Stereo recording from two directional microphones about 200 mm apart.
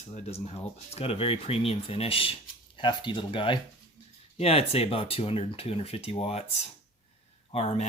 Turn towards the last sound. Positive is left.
turn(degrees=30)  # may be behind; listen again after turning